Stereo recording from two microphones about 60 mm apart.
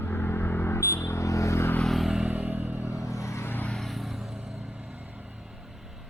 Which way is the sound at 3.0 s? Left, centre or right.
Left.